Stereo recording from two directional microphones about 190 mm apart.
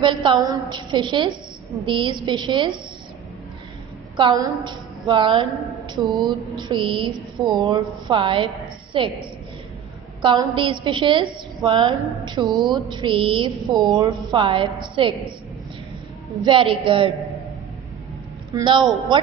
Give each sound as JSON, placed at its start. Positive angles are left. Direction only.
{"t": 0.0, "sound": "a woman's voice", "side_deg": -20}
{"t": 4.2, "sound": "a woman's voice", "side_deg": -25}
{"t": 10.2, "sound": "a woman's voice", "side_deg": -25}
{"t": 12.5, "sound": "speech", "side_deg": 0}
{"t": 12.9, "sound": "a woman's voice", "side_deg": -25}
{"t": 16.4, "sound": "a woman's voice", "side_deg": -25}
{"t": 18.5, "sound": "a woman's voice", "side_deg": -25}